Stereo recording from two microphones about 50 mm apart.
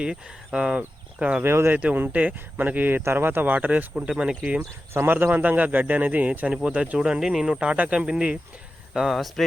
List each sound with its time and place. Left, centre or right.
0.0 s speech: centre
1.5 s speech: right
1.7 s a man's voice: right
3.0 s a man's voice: right
5.0 s a man's voice: right
7.2 s speech: centre
8.9 s speech: centre